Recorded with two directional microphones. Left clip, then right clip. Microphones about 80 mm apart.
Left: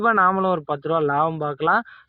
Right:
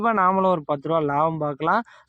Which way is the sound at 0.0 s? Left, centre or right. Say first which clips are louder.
Left 1 dB; right.